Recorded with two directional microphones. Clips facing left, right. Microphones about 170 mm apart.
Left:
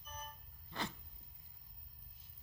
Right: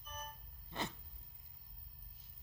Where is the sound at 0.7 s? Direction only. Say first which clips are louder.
Right 1 dB; 20° right (ahead or behind).